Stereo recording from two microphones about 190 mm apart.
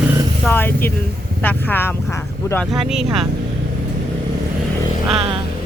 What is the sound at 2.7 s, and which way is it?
Speech, centre (ahead or behind).